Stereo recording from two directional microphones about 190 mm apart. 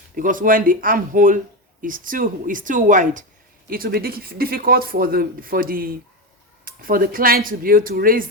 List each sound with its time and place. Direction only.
0.2 s speech: 45° right (ahead or behind)